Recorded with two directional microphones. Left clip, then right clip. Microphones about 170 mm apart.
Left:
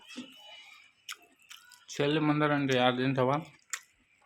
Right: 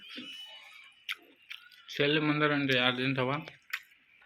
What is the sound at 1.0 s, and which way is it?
Chewing, 35° left (ahead or behind).